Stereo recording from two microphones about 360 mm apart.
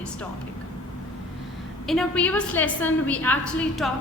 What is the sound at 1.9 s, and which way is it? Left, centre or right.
A woman's voice, centre.